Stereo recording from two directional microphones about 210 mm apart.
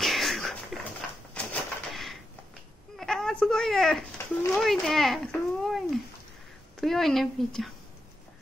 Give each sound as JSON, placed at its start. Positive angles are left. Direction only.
{"t": 0.0, "sound": "whispering", "side_deg": 0}
{"t": 1.3, "sound": "a sound", "side_deg": 5}
{"t": 4.6, "sound": "a woman's voice", "side_deg": 0}